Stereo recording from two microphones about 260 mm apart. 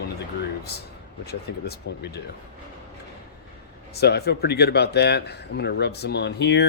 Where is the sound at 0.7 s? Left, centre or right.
Left.